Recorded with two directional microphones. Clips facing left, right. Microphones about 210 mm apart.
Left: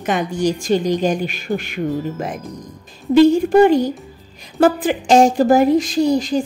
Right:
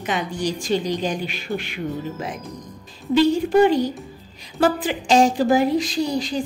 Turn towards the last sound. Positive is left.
turn(degrees=45)  # may be behind; listen again after turning